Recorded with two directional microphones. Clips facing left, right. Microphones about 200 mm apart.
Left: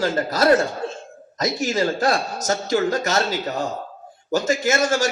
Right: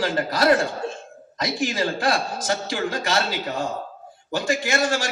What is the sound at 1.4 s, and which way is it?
A man's voice, 45° left (ahead or behind).